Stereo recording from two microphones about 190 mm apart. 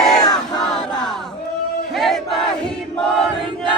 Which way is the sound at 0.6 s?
5° left (ahead or behind).